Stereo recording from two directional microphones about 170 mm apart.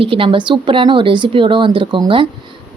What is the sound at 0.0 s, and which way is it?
Speech, 30° right (ahead or behind).